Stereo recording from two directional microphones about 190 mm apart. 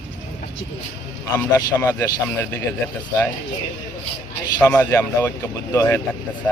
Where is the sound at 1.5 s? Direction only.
15° left (ahead or behind).